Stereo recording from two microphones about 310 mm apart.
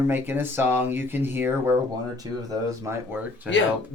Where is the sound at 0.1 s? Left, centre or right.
Centre.